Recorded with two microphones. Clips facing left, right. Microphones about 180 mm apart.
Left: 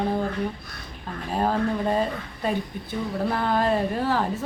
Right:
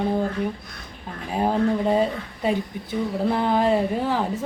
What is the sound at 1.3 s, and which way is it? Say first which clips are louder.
A woman's voice: right 3 dB; 15° right (ahead or behind).